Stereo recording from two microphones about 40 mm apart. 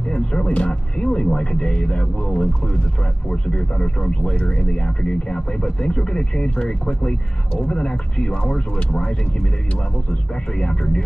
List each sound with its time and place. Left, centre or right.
0.1 s a sound: left
1.9 s speech: left
10.3 s speech: left